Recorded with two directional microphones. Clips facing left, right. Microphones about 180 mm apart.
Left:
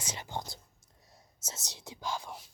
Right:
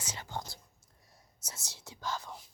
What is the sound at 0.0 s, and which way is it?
Whispering, 20° left (ahead or behind).